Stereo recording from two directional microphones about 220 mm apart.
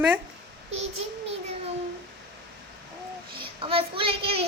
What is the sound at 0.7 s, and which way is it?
Child singing, 30° right (ahead or behind).